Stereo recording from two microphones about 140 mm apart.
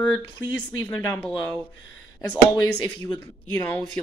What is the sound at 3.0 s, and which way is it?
Speech, 30° left (ahead or behind).